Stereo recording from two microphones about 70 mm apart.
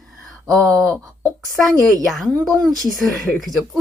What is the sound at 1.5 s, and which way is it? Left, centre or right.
Speech, centre.